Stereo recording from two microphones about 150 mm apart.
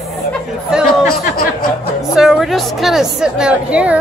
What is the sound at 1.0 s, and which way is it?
Speech, 70° left (ahead or behind).